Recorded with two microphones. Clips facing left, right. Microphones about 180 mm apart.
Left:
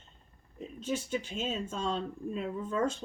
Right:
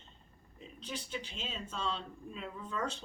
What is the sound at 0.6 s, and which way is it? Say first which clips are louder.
Speech: left 9 dB; 45° left (ahead or behind).